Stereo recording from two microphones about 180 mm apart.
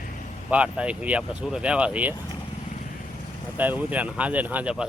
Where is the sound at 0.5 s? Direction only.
5° right (ahead or behind).